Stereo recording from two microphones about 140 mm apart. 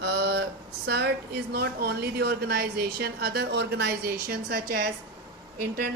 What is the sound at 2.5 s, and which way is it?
Speech, 90° right.